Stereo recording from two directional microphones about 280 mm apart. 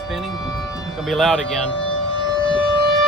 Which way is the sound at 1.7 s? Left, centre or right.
Centre.